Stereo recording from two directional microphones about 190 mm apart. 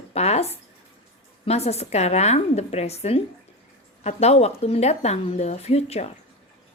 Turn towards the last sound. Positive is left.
turn(degrees=35)  # may be behind; listen again after turning